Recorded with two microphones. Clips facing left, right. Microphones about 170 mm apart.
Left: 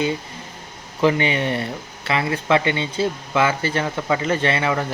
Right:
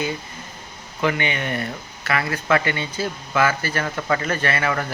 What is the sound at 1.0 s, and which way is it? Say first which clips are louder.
Speech: left 4 dB; 30° left (ahead or behind).